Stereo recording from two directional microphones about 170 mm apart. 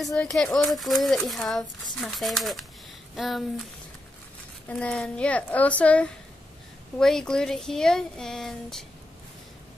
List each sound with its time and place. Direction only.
0.0 s speech: 5° left (ahead or behind)
4.6 s a woman's voice: 5° left (ahead or behind)